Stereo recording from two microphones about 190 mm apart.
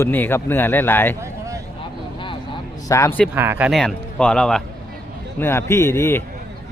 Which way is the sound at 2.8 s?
15° left (ahead or behind).